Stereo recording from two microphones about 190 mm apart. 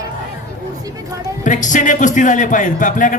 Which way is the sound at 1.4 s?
40° left (ahead or behind).